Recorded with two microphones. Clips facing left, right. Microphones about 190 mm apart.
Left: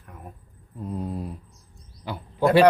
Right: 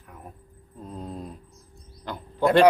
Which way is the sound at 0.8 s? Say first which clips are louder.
Left 5 dB; 10° left (ahead or behind).